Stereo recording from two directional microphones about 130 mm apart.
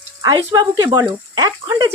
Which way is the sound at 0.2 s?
35° right (ahead or behind).